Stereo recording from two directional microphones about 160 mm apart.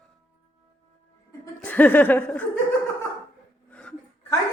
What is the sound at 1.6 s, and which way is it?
Laughter, 10° left (ahead or behind).